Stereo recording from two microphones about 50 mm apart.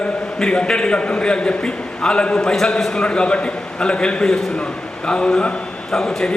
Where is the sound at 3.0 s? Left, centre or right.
Centre.